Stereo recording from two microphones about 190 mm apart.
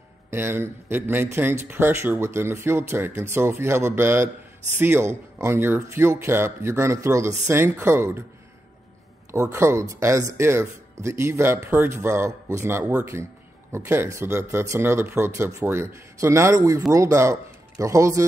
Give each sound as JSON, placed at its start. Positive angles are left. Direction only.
{"t": 0.3, "sound": "speech", "side_deg": -10}
{"t": 9.3, "sound": "speech", "side_deg": -15}